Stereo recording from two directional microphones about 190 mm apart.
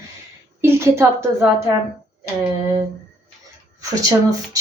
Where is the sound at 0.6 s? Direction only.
15° right (ahead or behind).